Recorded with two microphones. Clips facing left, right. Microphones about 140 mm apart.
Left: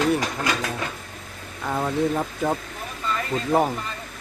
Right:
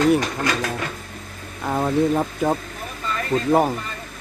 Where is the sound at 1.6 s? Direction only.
20° right (ahead or behind).